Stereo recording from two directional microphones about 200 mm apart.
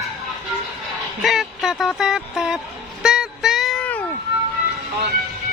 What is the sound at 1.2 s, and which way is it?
Speech, centre (ahead or behind).